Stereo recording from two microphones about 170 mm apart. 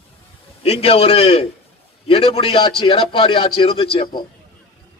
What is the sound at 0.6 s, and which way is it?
A man's voice, 35° left (ahead or behind).